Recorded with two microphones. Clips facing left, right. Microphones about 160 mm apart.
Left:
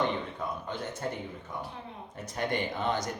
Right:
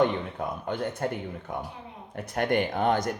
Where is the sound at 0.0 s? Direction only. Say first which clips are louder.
Right 6 dB; 55° right (ahead or behind).